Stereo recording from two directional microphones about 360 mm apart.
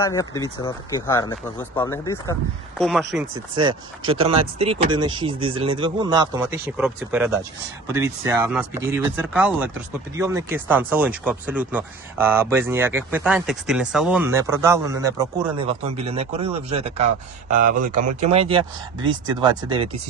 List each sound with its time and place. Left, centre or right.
0.0 s speech: centre
3.5 s a man's voice: centre